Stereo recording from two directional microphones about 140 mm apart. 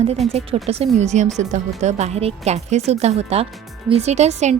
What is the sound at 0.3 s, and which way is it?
A woman's voice, 45° right (ahead or behind).